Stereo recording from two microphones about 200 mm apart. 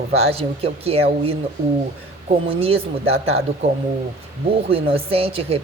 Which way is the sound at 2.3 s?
30° right (ahead or behind).